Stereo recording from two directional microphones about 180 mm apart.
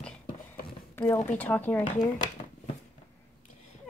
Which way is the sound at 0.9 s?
10° left (ahead or behind).